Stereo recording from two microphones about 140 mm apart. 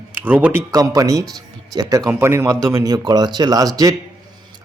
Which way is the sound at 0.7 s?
25° right (ahead or behind).